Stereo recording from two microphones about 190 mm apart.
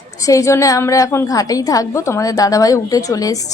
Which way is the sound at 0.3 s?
15° left (ahead or behind).